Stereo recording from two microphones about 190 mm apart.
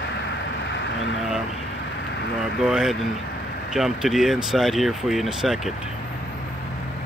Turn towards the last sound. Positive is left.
turn(degrees=0)  # may be behind; listen again after turning